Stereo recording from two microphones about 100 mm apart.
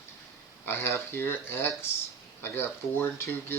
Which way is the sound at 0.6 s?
25° left (ahead or behind).